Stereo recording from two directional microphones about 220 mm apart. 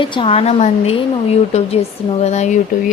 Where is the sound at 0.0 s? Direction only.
25° left (ahead or behind).